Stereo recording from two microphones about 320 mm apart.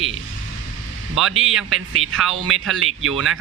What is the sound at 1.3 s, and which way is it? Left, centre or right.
Speech, right.